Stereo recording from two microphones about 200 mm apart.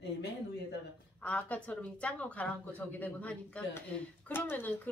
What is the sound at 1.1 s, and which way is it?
Speech, 5° left (ahead or behind).